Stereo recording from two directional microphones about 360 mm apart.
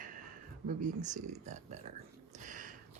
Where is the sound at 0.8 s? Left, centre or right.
Centre.